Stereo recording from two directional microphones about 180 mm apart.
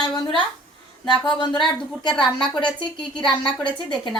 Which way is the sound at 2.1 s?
5° left (ahead or behind).